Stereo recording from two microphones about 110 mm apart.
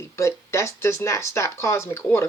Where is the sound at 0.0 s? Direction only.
25° left (ahead or behind).